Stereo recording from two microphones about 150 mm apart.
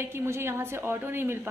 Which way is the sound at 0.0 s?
15° right (ahead or behind).